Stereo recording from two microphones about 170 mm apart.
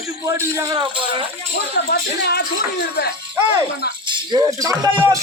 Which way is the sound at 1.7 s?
70° left (ahead or behind).